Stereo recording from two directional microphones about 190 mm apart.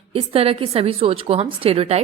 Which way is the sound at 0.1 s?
30° right (ahead or behind).